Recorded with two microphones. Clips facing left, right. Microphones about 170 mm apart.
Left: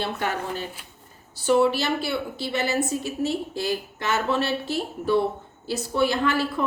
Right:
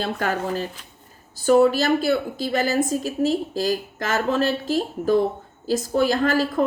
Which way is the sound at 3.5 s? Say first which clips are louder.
Right 4 dB; 40° right (ahead or behind).